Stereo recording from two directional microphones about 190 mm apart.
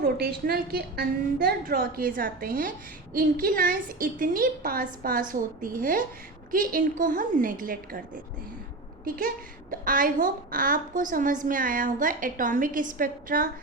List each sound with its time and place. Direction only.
0.0 s a woman's voice: 55° right (ahead or behind)
9.0 s a woman's voice: 50° right (ahead or behind)